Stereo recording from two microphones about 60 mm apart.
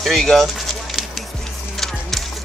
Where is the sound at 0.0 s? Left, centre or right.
Centre.